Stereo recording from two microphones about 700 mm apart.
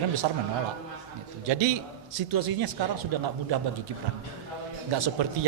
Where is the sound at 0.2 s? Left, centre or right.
Right.